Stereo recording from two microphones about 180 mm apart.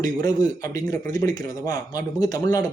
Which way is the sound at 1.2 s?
20° left (ahead or behind).